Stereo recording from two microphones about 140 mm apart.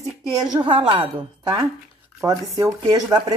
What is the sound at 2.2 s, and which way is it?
Speech, 25° right (ahead or behind).